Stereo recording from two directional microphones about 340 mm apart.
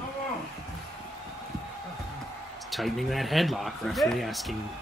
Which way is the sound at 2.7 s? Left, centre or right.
Centre.